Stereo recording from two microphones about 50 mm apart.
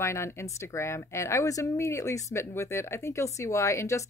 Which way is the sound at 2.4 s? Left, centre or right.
Left.